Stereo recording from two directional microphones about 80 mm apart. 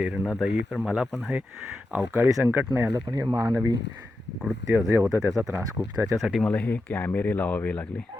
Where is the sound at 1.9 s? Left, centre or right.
Right.